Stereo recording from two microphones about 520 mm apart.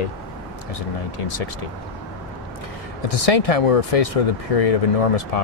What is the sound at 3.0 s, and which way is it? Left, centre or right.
Speech, left.